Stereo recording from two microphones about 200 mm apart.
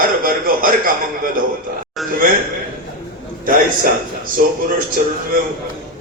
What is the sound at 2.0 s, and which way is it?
Speech, centre (ahead or behind).